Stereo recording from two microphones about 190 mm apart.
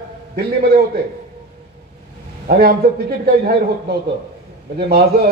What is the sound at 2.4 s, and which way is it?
Speech, 55° right (ahead or behind).